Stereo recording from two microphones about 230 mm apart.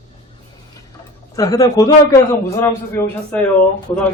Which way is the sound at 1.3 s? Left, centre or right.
Centre.